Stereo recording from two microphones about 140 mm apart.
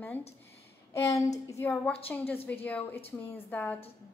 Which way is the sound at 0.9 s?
20° left (ahead or behind).